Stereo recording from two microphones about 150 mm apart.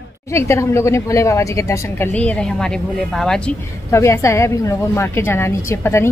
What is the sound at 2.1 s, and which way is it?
A woman's voice, 5° left (ahead or behind).